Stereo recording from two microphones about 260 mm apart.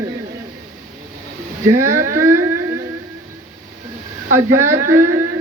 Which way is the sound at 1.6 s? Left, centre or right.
Centre.